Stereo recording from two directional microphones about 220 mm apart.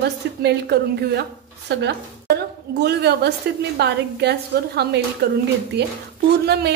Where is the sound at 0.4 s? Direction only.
50° right (ahead or behind).